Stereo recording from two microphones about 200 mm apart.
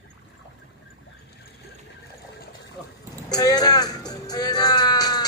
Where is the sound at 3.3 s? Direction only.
20° left (ahead or behind).